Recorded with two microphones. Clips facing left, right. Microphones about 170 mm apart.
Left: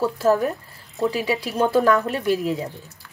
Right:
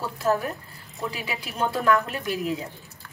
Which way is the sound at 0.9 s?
35° left (ahead or behind).